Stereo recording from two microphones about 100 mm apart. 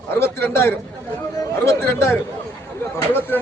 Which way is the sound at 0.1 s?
25° left (ahead or behind).